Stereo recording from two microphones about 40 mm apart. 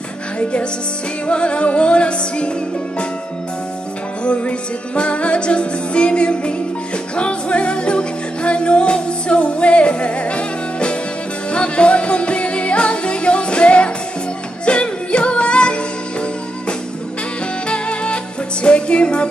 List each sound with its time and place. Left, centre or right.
0.4 s music: left
4.2 s music: left
17.6 s music: left